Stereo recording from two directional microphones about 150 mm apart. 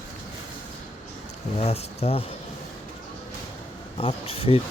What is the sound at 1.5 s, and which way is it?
Speech, 45° left (ahead or behind).